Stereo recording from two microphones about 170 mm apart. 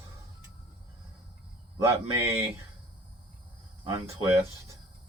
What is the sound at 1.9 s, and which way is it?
Speech, 15° right (ahead or behind).